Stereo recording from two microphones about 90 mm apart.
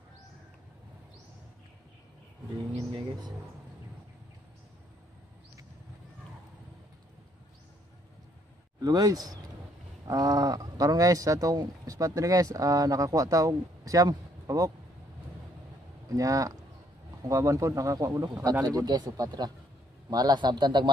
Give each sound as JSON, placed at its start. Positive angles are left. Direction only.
{"t": 2.9, "sound": "a sound", "side_deg": -50}
{"t": 8.8, "sound": "speech", "side_deg": -45}
{"t": 16.1, "sound": "a man's voice", "side_deg": -40}